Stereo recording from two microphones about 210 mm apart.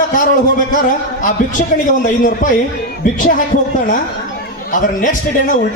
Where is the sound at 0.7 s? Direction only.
40° left (ahead or behind).